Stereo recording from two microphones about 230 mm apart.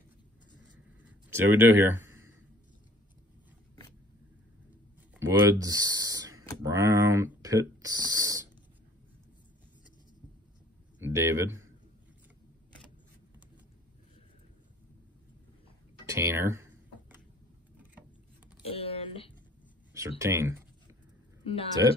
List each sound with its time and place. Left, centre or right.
1.3 s speech: centre
5.1 s speech: centre
11.0 s speech: centre
16.1 s typing: centre
18.7 s a sound: left
20.2 s speech: centre
21.4 s a woman's voice: left